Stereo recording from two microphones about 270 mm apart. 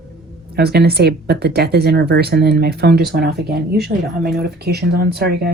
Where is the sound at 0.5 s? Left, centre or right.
Right.